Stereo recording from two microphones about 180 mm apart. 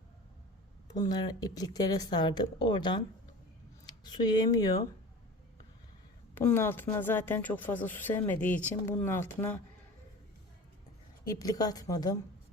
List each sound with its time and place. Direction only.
0.9 s speech: 20° left (ahead or behind)
6.3 s speech: 10° left (ahead or behind)
11.3 s speech: 20° left (ahead or behind)